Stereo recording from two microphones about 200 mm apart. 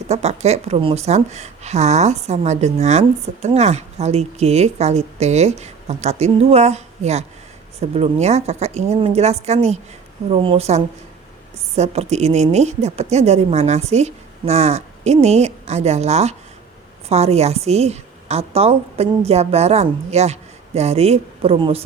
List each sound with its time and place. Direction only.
0.1 s a woman's voice: 35° right (ahead or behind)